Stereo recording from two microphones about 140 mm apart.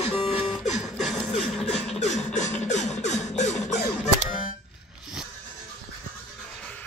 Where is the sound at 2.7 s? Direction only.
55° left (ahead or behind).